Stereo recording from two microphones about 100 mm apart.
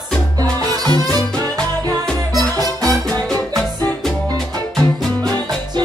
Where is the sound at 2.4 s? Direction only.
40° right (ahead or behind).